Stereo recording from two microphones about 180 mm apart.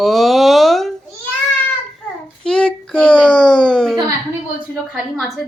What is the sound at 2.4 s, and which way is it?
A woman's voice, 5° left (ahead or behind).